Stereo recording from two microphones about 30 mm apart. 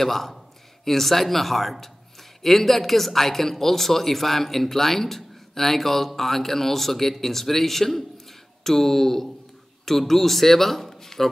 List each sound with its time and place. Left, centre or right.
0.0 s speech: centre